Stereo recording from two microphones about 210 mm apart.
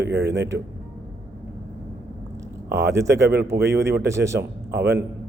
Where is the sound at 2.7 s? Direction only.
15° right (ahead or behind).